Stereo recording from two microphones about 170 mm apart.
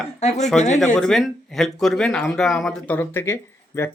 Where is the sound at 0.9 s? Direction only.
5° left (ahead or behind).